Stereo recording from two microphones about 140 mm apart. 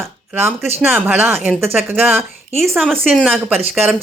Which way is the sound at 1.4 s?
15° right (ahead or behind).